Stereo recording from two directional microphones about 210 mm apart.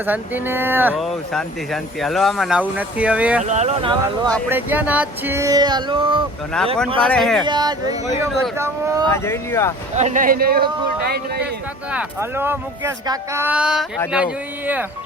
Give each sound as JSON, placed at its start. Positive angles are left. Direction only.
{"t": 0.0, "sound": "speech", "side_deg": -10}
{"t": 3.4, "sound": "speech", "side_deg": -35}
{"t": 4.4, "sound": "speech", "side_deg": -10}
{"t": 6.6, "sound": "speech", "side_deg": 5}
{"t": 7.4, "sound": "speech", "side_deg": -20}
{"t": 9.1, "sound": "speech", "side_deg": 10}
{"t": 9.9, "sound": "speech", "side_deg": -35}
{"t": 11.9, "sound": "speech", "side_deg": -10}